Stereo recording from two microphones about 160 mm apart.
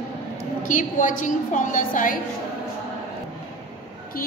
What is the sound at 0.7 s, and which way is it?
A woman's voice, 55° left (ahead or behind).